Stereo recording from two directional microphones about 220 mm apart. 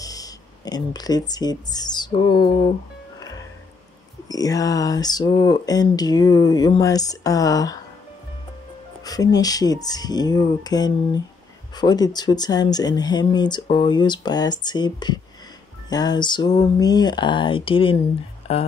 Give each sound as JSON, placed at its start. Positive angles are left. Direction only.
{"t": 0.0, "sound": "speech", "side_deg": 15}
{"t": 4.3, "sound": "speech", "side_deg": 15}
{"t": 9.0, "sound": "speech", "side_deg": 15}